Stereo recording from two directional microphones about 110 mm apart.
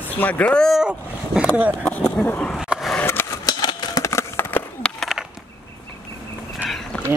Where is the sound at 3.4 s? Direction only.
35° left (ahead or behind).